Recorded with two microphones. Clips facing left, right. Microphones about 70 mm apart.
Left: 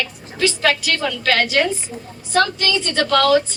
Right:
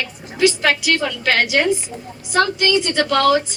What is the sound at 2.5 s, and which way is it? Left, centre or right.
Speech, centre.